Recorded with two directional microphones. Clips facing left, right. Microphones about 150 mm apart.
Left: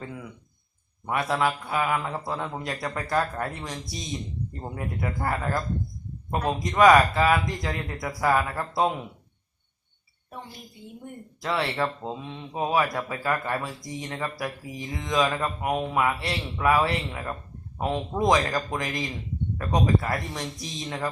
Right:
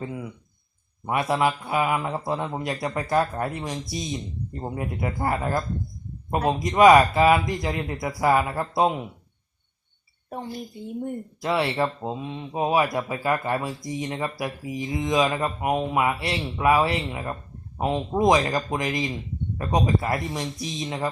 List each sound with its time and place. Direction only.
0.0 s speech: 15° right (ahead or behind)
11.4 s speech: 15° right (ahead or behind)